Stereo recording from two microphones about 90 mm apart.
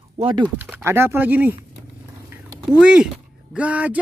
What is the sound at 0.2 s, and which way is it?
Speech, 60° right (ahead or behind).